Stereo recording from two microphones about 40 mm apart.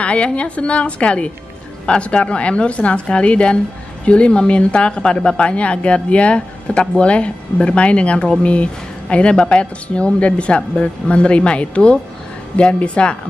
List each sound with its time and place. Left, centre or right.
0.0 s speech: left